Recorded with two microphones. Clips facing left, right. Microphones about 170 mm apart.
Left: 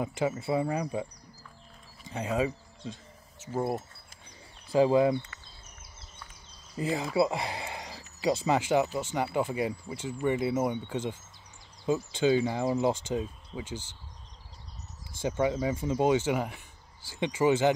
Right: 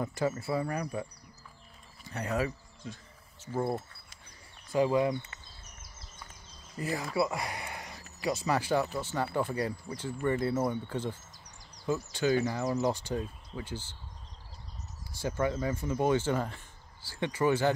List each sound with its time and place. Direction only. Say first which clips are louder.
0.0 s speech: left 2 dB; 15° left (ahead or behind)
2.0 s speech: left 3 dB; 20° left (ahead or behind)
4.7 s speech: left 4 dB; 25° left (ahead or behind)
6.8 s speech: left 4 dB; 25° left (ahead or behind)
15.1 s speech: left 3 dB; 20° left (ahead or behind)